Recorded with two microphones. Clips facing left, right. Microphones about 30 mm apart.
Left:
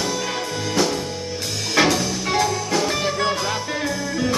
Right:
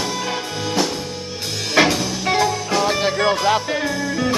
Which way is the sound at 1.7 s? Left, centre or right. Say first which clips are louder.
Right 2 dB; centre.